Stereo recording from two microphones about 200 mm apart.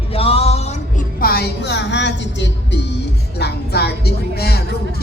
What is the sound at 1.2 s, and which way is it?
Speech, 50° left (ahead or behind).